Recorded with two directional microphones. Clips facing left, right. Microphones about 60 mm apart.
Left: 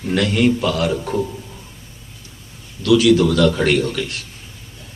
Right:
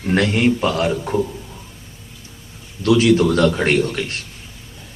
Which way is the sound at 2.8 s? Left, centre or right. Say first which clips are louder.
Left 1 dB; right.